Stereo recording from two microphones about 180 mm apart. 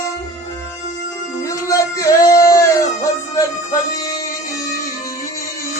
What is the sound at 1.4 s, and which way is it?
Music, 20° left (ahead or behind).